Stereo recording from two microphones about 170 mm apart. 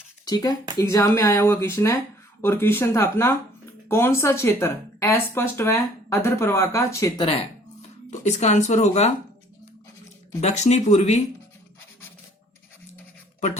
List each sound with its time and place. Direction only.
0.3 s speech: 25° left (ahead or behind)
7.2 s speech: 35° left (ahead or behind)
10.4 s speech: 40° left (ahead or behind)